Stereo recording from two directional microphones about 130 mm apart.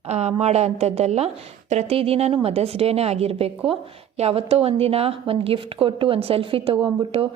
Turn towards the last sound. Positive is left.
turn(degrees=-40)  # may be behind; listen again after turning